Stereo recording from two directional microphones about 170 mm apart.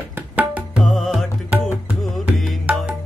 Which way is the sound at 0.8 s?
Centre (ahead or behind).